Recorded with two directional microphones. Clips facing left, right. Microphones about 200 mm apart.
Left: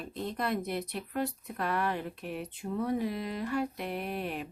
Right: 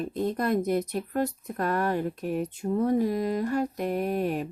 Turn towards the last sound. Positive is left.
turn(degrees=-45)  # may be behind; listen again after turning